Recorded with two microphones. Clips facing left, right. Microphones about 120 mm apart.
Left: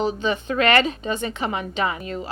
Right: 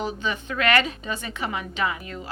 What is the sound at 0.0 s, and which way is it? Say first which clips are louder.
Speech: left 5 dB; 25° left (ahead or behind).